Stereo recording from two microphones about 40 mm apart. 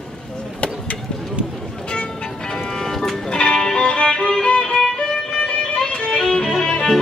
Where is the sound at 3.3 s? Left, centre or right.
Left.